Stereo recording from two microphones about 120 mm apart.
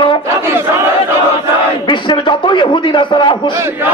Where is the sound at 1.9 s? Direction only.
40° left (ahead or behind).